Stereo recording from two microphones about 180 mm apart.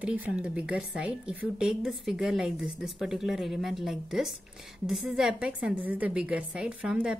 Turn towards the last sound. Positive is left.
turn(degrees=-5)  # may be behind; listen again after turning